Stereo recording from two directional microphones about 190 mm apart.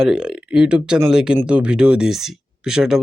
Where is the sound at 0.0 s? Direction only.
5° right (ahead or behind).